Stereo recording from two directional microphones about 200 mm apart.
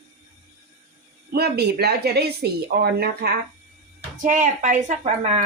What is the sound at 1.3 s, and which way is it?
Speech, 55° right (ahead or behind).